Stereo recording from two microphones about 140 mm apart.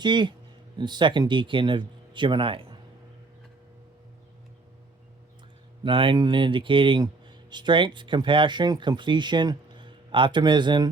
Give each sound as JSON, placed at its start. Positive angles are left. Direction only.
{"t": 0.0, "sound": "speech", "side_deg": -35}
{"t": 5.8, "sound": "speech", "side_deg": -40}